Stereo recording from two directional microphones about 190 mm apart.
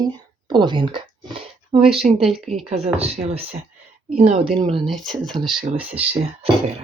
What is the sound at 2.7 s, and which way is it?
Speech, 35° right (ahead or behind).